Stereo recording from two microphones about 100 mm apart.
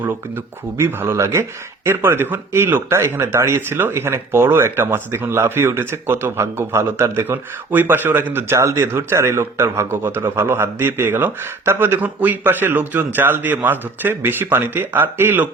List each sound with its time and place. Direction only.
0.8 s speech: 25° right (ahead or behind)